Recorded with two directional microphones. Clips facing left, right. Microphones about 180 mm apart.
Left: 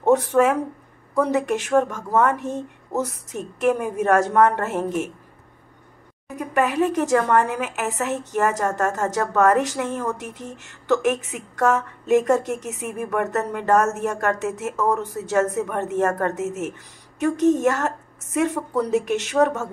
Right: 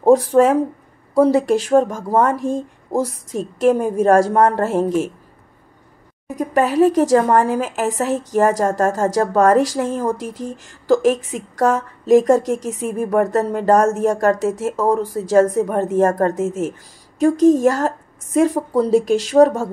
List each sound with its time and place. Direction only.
0.0 s a woman's voice: 35° right (ahead or behind)
6.2 s a woman's voice: 35° right (ahead or behind)